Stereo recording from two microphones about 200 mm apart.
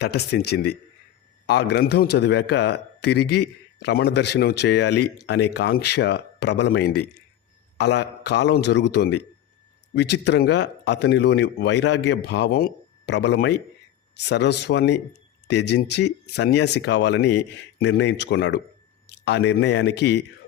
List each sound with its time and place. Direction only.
0.0 s a man's voice: 55° left (ahead or behind)